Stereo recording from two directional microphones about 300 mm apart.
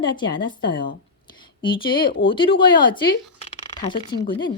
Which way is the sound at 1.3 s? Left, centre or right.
Centre.